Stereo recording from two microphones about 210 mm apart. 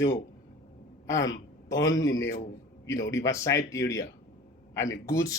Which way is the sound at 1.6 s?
15° left (ahead or behind).